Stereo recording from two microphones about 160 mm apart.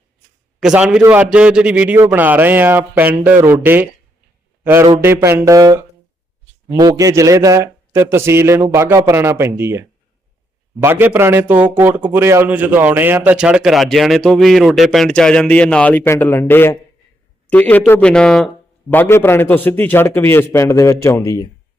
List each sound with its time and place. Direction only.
0.6 s a man's voice: 5° right (ahead or behind)
10.8 s a man's voice: 15° right (ahead or behind); by 21.4 s 20° left (ahead or behind)